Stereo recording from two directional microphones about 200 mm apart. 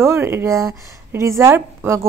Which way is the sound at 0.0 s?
10° right (ahead or behind).